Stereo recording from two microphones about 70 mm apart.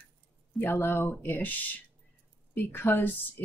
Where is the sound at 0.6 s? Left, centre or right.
Left.